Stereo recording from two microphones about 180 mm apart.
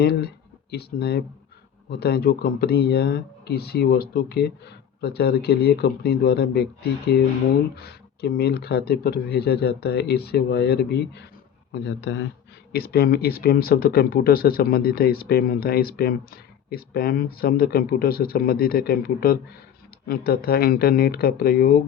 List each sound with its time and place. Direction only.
0.0 s speech: 65° left (ahead or behind)
7.8 s speech: 60° left (ahead or behind)
11.7 s speech: 75° left (ahead or behind)
12.7 s speech: 60° left (ahead or behind)